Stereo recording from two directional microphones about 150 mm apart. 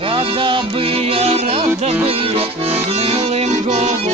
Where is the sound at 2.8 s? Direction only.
40° right (ahead or behind).